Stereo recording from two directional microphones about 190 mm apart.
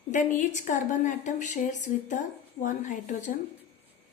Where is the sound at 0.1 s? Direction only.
40° left (ahead or behind).